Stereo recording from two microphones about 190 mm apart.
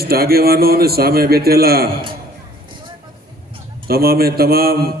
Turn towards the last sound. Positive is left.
turn(degrees=-55)  # may be behind; listen again after turning